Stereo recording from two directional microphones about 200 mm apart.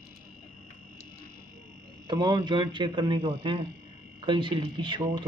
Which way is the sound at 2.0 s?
20° right (ahead or behind).